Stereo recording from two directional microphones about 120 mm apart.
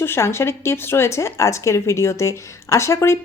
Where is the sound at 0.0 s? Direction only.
20° left (ahead or behind).